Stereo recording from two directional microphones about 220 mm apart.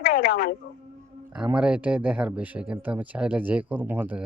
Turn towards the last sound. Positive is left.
turn(degrees=-10)  # may be behind; listen again after turning